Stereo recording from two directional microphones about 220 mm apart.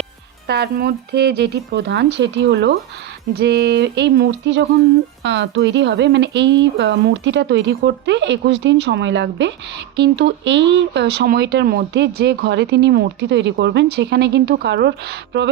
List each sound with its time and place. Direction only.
0.4 s speech: 45° right (ahead or behind)